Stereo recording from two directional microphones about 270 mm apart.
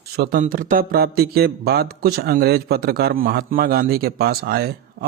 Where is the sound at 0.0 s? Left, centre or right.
Right.